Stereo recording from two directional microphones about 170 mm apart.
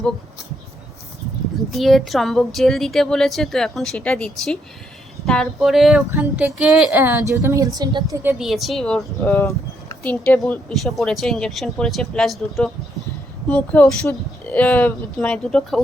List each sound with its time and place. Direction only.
1.5 s a woman's voice: centre (ahead or behind); by 8.2 s 25° right (ahead or behind)
8.2 s a woman's voice: 5° right (ahead or behind)